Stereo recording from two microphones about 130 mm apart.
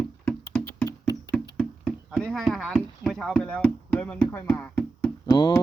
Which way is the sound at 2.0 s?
Centre (ahead or behind).